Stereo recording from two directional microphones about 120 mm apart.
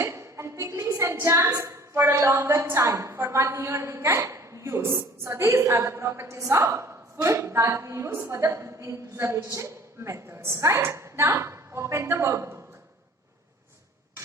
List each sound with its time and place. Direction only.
0.0 s a woman's voice: 25° right (ahead or behind)